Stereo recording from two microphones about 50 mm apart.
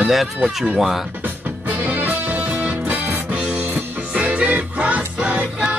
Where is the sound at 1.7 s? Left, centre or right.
Right.